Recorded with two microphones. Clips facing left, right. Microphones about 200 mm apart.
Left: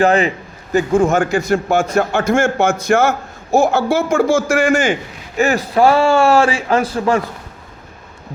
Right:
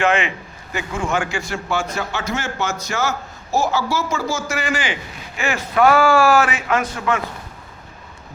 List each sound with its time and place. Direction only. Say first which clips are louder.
0.0 s a man's voice: left 6 dB; 35° left (ahead or behind)